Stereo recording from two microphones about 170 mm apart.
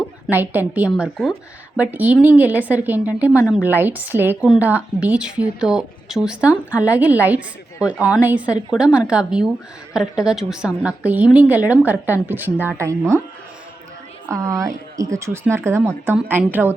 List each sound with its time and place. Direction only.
0.3 s a woman's voice: 10° right (ahead or behind)
14.3 s a woman's voice: 20° right (ahead or behind)